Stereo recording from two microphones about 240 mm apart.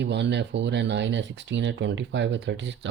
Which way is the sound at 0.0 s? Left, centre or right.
Right.